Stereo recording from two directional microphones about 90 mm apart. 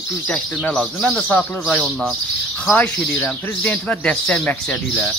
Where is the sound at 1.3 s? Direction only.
20° left (ahead or behind).